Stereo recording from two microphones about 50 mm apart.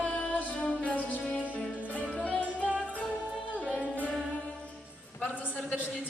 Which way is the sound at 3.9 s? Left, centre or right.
Left.